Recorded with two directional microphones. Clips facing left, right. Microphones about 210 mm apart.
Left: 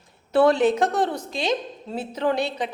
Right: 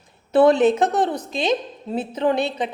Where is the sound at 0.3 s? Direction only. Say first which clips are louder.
Right 3 dB; 20° right (ahead or behind).